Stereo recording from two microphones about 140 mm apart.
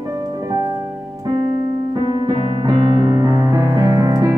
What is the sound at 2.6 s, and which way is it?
Music, 30° right (ahead or behind).